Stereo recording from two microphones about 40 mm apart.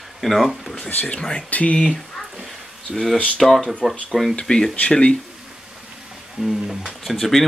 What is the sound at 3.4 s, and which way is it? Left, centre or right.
Speech, centre.